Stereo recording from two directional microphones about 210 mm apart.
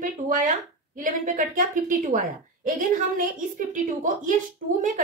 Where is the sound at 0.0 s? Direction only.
40° right (ahead or behind).